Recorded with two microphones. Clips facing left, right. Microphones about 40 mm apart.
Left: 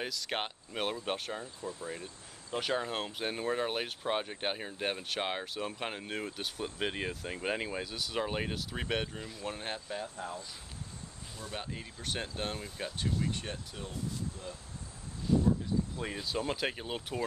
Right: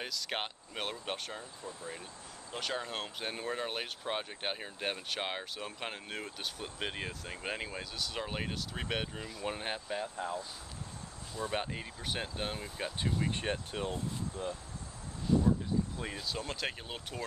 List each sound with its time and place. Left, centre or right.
0.0 s speech: centre
13.2 s speech: right
16.0 s speech: centre